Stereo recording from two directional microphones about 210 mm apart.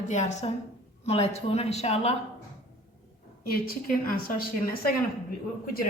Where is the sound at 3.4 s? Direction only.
45° left (ahead or behind).